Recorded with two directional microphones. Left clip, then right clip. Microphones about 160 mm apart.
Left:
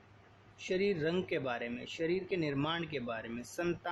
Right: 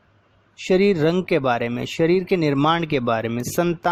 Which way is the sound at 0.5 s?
65° right (ahead or behind).